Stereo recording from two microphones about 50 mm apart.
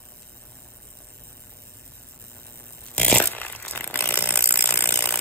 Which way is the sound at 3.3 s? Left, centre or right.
Left.